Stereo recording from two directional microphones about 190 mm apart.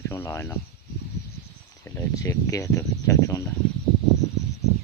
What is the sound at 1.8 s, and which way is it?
Speech, 15° left (ahead or behind).